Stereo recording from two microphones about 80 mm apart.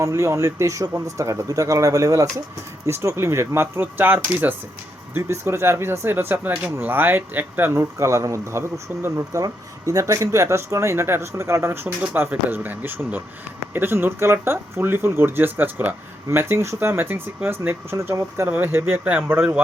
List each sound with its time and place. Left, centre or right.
0.0 s speech: right
9.4 s speech: right
17.9 s speech: right